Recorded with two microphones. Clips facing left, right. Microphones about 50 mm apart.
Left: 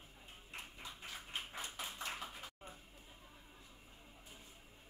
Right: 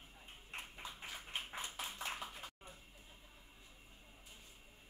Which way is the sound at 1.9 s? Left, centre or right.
Centre.